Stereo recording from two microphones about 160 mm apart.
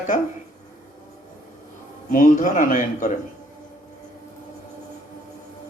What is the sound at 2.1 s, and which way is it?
Speech, 55° left (ahead or behind).